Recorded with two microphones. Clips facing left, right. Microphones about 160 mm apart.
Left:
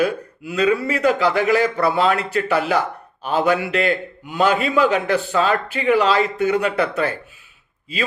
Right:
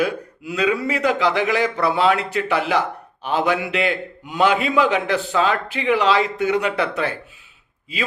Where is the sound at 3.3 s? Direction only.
15° right (ahead or behind).